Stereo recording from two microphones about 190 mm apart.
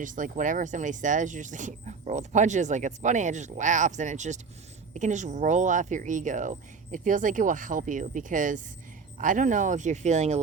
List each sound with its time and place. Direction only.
0.0 s speech: 45° right (ahead or behind)